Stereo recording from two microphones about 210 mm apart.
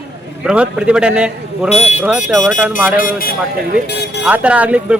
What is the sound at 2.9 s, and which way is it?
Speech, 40° left (ahead or behind).